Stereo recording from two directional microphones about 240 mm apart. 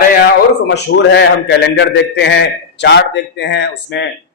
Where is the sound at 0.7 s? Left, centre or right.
Left.